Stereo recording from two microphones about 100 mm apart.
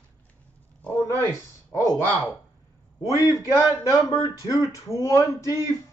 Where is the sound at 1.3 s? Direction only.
35° left (ahead or behind).